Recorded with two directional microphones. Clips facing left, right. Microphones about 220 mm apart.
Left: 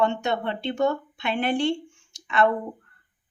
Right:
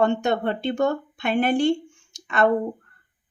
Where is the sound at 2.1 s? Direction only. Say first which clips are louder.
Right 1 dB; 45° right (ahead or behind).